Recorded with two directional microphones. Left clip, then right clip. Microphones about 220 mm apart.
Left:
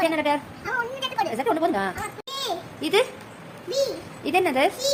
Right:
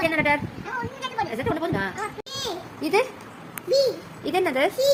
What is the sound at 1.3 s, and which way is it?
Speech, 10° left (ahead or behind).